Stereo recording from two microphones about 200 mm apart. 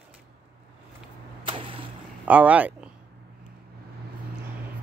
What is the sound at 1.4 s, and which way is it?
Arrow, 25° right (ahead or behind).